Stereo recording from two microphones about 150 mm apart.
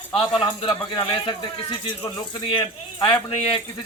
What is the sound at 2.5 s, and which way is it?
Speech, 35° left (ahead or behind).